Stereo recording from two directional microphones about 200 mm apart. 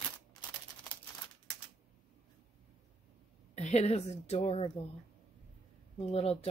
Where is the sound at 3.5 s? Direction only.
35° left (ahead or behind).